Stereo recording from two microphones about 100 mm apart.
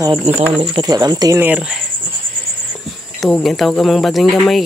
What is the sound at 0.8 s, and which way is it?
Speech, 40° right (ahead or behind).